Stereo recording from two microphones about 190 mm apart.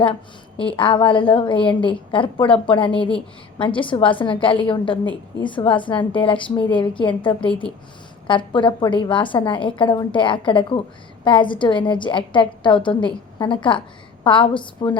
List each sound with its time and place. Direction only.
0.6 s a woman's voice: 25° left (ahead or behind)